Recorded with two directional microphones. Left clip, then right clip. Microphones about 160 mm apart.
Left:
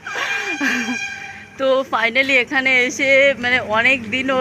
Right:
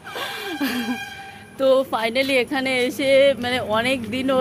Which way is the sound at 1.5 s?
10° right (ahead or behind).